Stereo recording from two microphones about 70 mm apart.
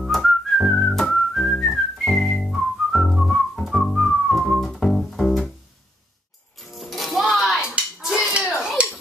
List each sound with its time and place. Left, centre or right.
0.1 s whistling: centre
6.7 s music: centre
7.6 s clapping: centre
8.8 s finger snapping: centre